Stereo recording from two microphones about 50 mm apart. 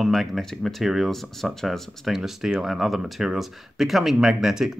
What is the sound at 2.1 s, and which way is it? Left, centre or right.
Speech, centre.